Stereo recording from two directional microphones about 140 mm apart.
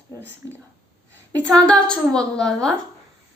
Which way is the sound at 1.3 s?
5° left (ahead or behind).